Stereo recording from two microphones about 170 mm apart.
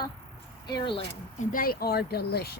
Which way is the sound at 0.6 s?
25° left (ahead or behind).